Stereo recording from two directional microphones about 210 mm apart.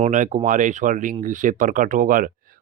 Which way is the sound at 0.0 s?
35° right (ahead or behind).